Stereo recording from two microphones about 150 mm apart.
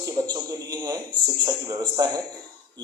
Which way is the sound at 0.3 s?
30° right (ahead or behind).